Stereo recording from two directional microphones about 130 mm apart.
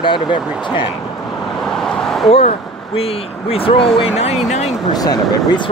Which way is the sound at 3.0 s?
50° left (ahead or behind).